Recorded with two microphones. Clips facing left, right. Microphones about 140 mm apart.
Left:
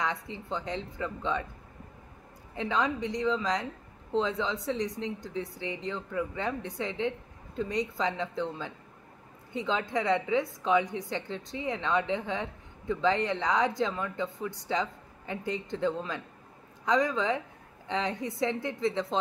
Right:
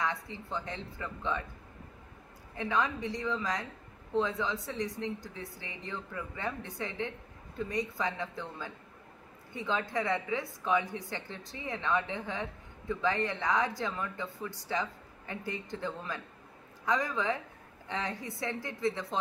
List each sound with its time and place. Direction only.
0.0 s a woman's voice: 20° left (ahead or behind)
2.5 s a woman's voice: 20° left (ahead or behind)